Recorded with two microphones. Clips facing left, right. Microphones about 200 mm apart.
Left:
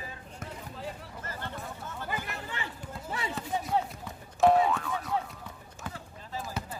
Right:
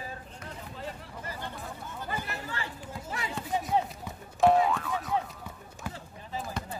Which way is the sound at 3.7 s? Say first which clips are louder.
Right 1 dB; centre (ahead or behind).